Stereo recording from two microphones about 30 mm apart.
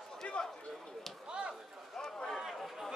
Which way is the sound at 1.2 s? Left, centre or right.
Right.